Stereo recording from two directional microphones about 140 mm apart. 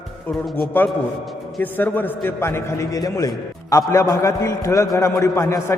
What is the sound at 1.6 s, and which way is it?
A man's voice, 15° left (ahead or behind).